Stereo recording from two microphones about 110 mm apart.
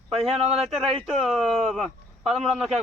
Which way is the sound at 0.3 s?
70° right (ahead or behind).